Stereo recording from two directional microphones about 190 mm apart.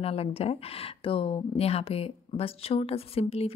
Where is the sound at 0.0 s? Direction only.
30° left (ahead or behind).